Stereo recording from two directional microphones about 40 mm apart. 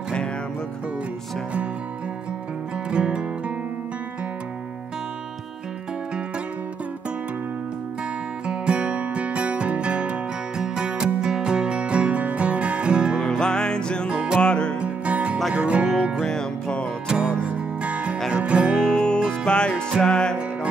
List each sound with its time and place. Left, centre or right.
2.9 s music: right
8.5 s music: right
13.4 s music: left
14.8 s music: right
16.3 s music: centre
17.1 s music: right
17.5 s music: right
18.9 s music: centre